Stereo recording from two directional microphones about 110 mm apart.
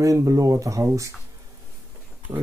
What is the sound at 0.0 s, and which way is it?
Speech, 30° right (ahead or behind).